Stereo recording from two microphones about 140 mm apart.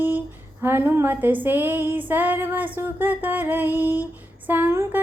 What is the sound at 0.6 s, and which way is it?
Speech, 15° right (ahead or behind).